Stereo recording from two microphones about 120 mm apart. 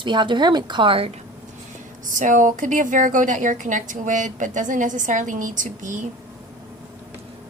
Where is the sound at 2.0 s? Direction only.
90° right.